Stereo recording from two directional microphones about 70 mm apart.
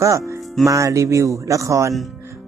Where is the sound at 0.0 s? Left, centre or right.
Right.